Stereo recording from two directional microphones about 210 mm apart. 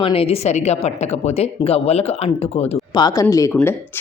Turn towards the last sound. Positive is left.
turn(degrees=10)  # may be behind; listen again after turning